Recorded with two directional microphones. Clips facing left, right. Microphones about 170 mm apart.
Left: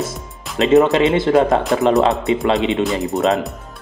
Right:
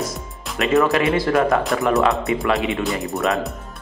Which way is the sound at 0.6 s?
20° left (ahead or behind).